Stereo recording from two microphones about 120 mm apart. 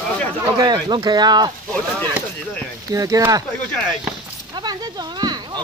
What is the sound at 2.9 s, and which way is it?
Speech, 30° right (ahead or behind).